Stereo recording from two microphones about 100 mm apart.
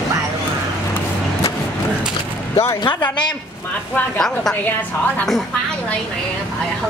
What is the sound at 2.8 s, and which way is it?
Speech, 50° left (ahead or behind).